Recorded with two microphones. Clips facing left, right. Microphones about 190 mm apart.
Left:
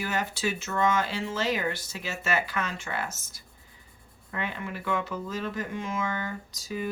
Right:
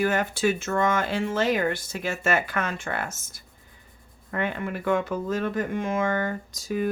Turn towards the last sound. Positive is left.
turn(degrees=-55)  # may be behind; listen again after turning